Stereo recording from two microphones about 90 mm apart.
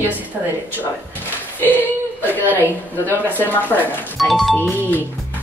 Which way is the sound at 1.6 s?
20° left (ahead or behind).